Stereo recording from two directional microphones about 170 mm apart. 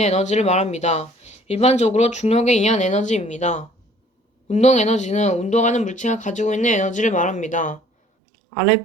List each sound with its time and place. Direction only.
0.0 s speech: 40° left (ahead or behind)